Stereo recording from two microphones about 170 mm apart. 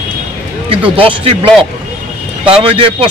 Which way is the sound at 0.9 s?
30° right (ahead or behind).